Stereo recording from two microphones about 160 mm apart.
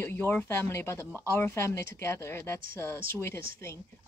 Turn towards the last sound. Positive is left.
turn(degrees=15)  # may be behind; listen again after turning